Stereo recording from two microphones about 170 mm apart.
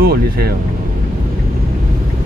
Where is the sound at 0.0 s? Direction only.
65° right (ahead or behind).